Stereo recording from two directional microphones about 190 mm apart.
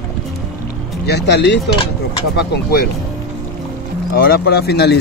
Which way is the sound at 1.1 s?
60° left (ahead or behind).